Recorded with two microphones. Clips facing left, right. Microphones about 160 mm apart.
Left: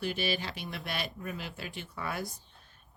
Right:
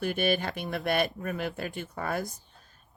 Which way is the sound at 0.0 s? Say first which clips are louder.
Right 6 dB; 50° right (ahead or behind).